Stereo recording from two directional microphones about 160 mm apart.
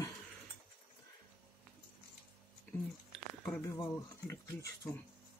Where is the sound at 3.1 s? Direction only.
5° left (ahead or behind).